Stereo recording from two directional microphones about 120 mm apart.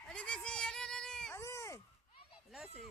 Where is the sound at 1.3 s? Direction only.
25° left (ahead or behind).